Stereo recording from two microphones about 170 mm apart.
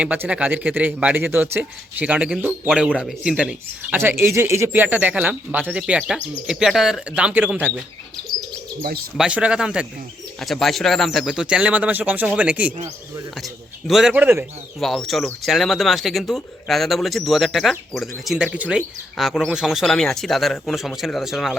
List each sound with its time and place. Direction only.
0.0 s speech: 10° right (ahead or behind)
9.1 s speech: 5° right (ahead or behind)
14.8 s speech: centre (ahead or behind)